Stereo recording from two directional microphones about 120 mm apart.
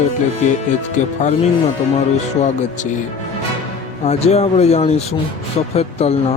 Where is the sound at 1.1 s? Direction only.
80° left.